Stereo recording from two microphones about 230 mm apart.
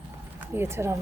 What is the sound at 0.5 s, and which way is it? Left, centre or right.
Speech, centre.